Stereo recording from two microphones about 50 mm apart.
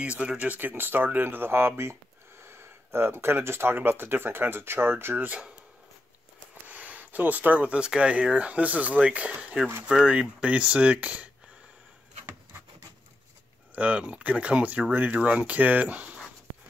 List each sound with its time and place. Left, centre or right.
0.0 s speech: right
6.5 s speech: right
13.7 s speech: right